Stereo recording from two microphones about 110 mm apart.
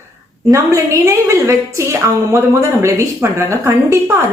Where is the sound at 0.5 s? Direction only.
25° right (ahead or behind).